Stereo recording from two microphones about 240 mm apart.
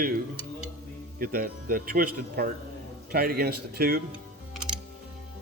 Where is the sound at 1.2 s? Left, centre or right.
Right.